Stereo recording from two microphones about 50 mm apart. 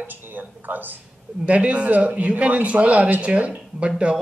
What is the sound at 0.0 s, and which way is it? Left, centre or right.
Speech, right.